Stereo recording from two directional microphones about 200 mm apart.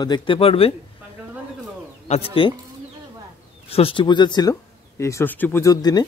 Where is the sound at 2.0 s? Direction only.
30° left (ahead or behind).